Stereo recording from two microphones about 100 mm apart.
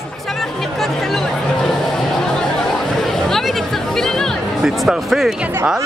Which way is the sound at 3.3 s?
Centre (ahead or behind).